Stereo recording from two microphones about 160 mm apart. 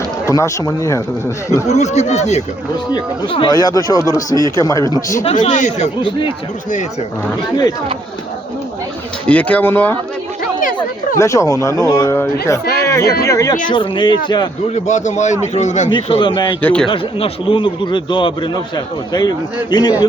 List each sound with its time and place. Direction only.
0.3 s speech: 20° left (ahead or behind)
1.6 s a man's voice: 45° left (ahead or behind)
2.9 s speech: 25° left (ahead or behind)
5.3 s a man's voice: 50° left (ahead or behind)
6.0 s a man's voice: 30° left (ahead or behind)
9.2 s speech: 10° left (ahead or behind)
11.2 s speech: 20° left (ahead or behind)
12.6 s speech: 80° left
12.9 s speech: 20° left (ahead or behind)
14.8 s a man's voice: 50° left (ahead or behind)
15.9 s speech: 30° left (ahead or behind)
16.6 s speech: 5° left (ahead or behind)
16.9 s a man's voice: 35° left (ahead or behind)
19.7 s speech: 25° left (ahead or behind)